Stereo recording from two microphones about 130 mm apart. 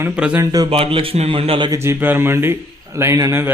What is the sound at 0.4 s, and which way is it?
Speech, 30° right (ahead or behind).